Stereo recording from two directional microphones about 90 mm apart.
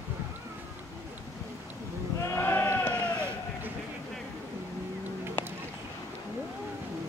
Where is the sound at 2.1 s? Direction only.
30° left (ahead or behind).